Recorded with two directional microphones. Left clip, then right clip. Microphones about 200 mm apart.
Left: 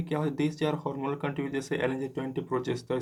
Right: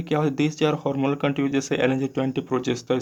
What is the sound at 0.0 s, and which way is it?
Speech, 40° right (ahead or behind).